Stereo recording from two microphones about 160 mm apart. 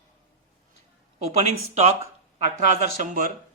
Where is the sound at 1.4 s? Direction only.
45° right (ahead or behind).